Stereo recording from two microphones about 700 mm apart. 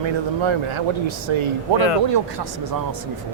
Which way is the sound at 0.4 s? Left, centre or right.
Right.